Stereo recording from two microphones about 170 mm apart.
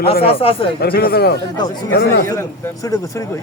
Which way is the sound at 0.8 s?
65° left (ahead or behind).